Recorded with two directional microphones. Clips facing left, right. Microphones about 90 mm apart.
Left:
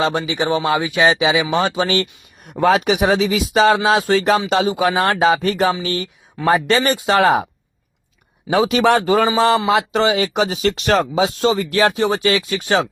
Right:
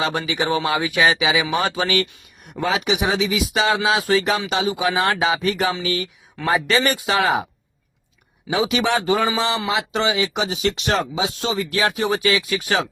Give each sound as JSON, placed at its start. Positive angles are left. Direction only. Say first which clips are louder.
{"t": 0.0, "sound": "speech", "louder": "left 3 dB", "side_deg": 25}
{"t": 2.6, "sound": "a man's voice", "louder": "left 6 dB", "side_deg": 55}
{"t": 8.4, "sound": "a man's voice", "louder": "left 6 dB", "side_deg": 45}